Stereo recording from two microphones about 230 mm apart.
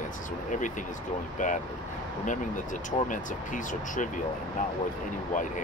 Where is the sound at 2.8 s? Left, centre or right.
Left.